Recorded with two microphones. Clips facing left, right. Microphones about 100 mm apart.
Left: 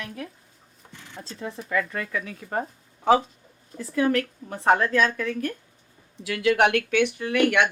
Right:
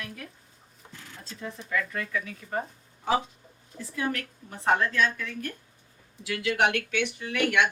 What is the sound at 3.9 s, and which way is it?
A woman's voice, 90° left.